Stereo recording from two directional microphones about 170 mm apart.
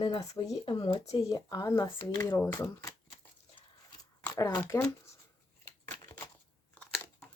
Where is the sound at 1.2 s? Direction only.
20° left (ahead or behind).